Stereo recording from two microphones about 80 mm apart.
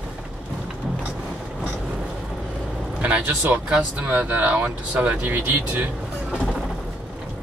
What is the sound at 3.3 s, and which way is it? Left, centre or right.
Speech, right.